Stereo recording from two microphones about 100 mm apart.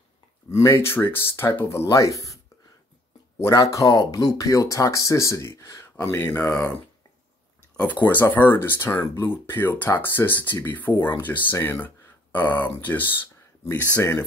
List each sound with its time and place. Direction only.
0.6 s speech: 30° left (ahead or behind)
3.7 s speech: 35° left (ahead or behind); by 6.7 s 15° left (ahead or behind)
7.7 s speech: 15° left (ahead or behind)
13.2 s a sound: 20° left (ahead or behind)
13.9 s speech: 25° left (ahead or behind)